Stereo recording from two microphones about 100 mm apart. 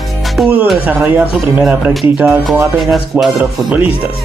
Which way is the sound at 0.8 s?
20° right (ahead or behind).